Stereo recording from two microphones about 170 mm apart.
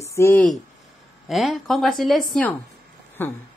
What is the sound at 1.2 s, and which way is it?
A woman's voice, centre (ahead or behind).